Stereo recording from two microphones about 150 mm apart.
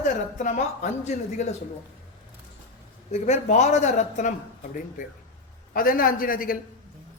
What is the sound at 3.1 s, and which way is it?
A man's voice, 50° left (ahead or behind).